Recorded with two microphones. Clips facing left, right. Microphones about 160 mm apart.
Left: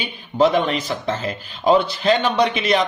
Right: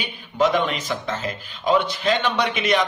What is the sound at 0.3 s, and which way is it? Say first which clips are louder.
A man's voice: left 3 dB; 30° left (ahead or behind).